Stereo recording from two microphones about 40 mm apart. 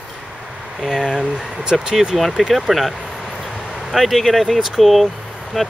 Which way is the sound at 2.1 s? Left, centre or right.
Centre.